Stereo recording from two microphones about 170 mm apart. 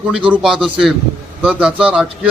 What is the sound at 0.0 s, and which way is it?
A man's voice, 5° right (ahead or behind).